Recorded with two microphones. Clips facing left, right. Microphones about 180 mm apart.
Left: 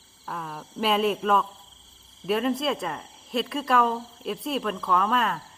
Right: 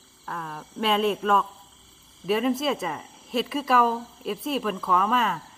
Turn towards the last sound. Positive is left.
turn(degrees=0)  # may be behind; listen again after turning